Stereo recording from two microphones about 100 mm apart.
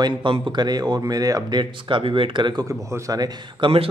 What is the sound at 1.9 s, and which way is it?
Speech, 60° right (ahead or behind).